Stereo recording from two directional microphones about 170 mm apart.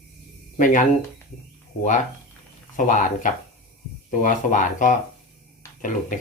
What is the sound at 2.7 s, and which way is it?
Speech, 50° left (ahead or behind).